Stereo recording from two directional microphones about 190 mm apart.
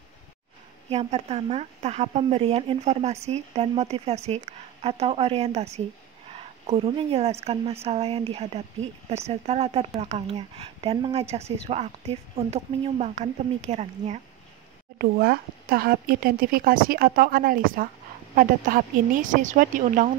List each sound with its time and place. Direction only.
0.8 s speech: 35° right (ahead or behind)
15.0 s speech: 55° right (ahead or behind)